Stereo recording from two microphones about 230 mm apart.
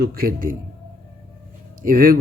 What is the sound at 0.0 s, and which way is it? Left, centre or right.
Speech, right.